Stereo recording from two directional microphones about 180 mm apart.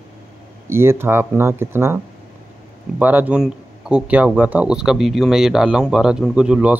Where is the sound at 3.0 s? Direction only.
10° right (ahead or behind).